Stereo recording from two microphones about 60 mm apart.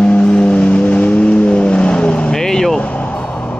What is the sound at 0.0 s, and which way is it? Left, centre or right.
Vehicle, centre.